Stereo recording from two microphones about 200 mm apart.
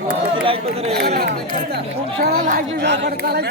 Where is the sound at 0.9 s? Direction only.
55° right (ahead or behind).